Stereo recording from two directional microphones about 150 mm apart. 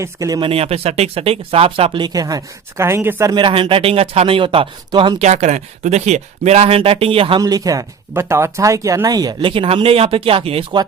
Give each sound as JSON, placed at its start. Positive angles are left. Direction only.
{"t": 0.0, "sound": "speech", "side_deg": -20}
{"t": 3.3, "sound": "speech", "side_deg": -35}
{"t": 5.2, "sound": "speech", "side_deg": -45}
{"t": 7.4, "sound": "speech", "side_deg": -25}